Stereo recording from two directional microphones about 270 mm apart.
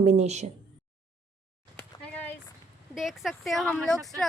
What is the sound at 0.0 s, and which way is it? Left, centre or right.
Speech, right.